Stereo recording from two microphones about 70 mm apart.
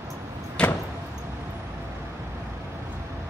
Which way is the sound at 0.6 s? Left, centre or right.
Centre.